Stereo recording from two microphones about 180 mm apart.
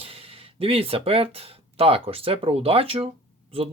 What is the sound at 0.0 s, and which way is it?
Speech, 30° right (ahead or behind).